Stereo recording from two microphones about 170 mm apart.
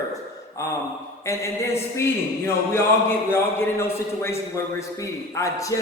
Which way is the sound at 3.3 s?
15° left (ahead or behind).